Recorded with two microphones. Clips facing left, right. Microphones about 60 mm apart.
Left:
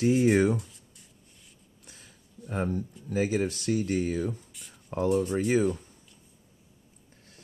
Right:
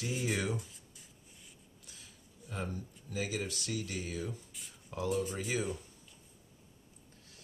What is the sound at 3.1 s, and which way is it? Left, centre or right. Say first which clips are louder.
Speech: left 10 dB; left.